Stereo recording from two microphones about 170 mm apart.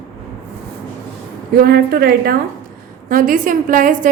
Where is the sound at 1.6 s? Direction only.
65° right (ahead or behind).